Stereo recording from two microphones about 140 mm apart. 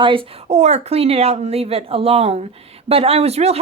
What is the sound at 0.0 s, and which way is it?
Speech, 40° right (ahead or behind).